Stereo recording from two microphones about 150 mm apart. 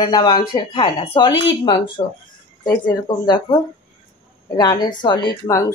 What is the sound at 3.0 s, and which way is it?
A woman's voice, 30° left (ahead or behind).